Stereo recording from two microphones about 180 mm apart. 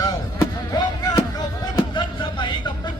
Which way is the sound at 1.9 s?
25° left (ahead or behind).